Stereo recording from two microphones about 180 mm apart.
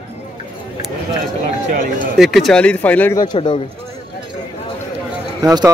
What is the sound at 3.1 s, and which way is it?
Speech, 25° left (ahead or behind).